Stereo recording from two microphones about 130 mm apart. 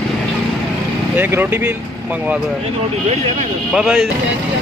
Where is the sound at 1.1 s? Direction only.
15° right (ahead or behind).